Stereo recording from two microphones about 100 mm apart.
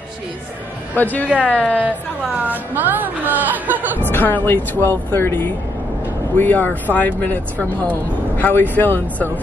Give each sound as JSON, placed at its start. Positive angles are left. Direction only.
{"t": 0.9, "sound": "speech", "side_deg": 15}
{"t": 2.4, "sound": "a woman's voice", "side_deg": -15}
{"t": 4.0, "sound": "speech", "side_deg": 20}